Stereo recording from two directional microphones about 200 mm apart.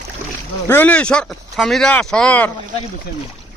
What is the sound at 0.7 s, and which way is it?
Speech, 10° left (ahead or behind).